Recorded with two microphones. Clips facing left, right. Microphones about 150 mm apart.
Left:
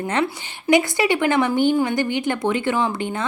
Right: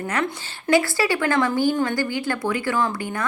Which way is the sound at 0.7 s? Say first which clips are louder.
Left 2 dB; 20° left (ahead or behind).